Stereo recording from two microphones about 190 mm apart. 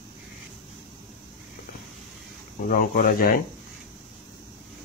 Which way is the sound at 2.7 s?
50° left (ahead or behind).